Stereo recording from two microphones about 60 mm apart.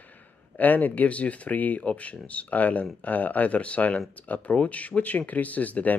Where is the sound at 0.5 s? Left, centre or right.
Left.